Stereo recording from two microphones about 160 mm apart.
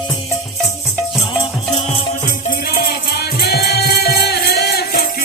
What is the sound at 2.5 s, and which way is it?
Music, 75° left (ahead or behind).